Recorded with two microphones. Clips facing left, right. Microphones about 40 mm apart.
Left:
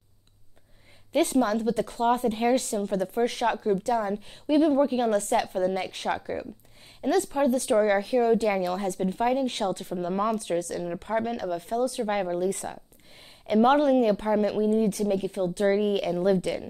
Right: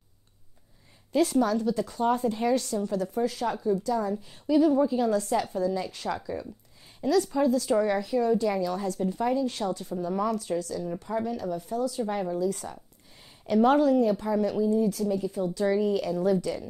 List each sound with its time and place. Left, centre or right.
1.1 s a woman's voice: left
7.0 s a woman's voice: left
7.8 s a woman's voice: left